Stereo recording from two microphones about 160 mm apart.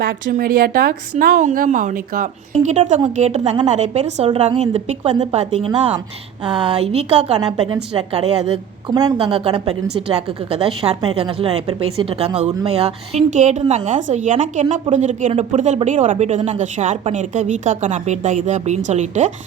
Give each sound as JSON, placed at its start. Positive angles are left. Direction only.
{"t": 0.3, "sound": "a woman's voice", "side_deg": -60}
{"t": 6.4, "sound": "speech", "side_deg": -30}
{"t": 7.3, "sound": "a woman's voice", "side_deg": -25}
{"t": 7.9, "sound": "speech", "side_deg": -40}
{"t": 8.9, "sound": "a woman's voice", "side_deg": -25}
{"t": 9.3, "sound": "a woman's voice", "side_deg": -35}